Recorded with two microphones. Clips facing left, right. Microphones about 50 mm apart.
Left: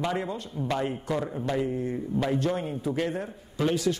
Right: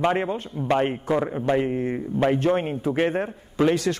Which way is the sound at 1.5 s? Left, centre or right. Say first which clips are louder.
Right 4 dB; right.